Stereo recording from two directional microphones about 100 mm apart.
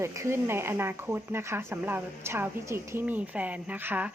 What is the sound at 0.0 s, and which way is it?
A woman's voice, 30° right (ahead or behind).